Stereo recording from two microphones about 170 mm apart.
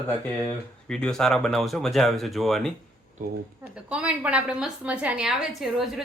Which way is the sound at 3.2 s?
55° right (ahead or behind).